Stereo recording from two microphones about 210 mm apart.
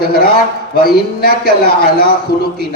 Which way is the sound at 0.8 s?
45° left (ahead or behind).